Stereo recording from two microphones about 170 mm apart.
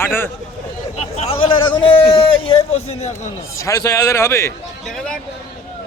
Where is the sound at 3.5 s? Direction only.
20° left (ahead or behind).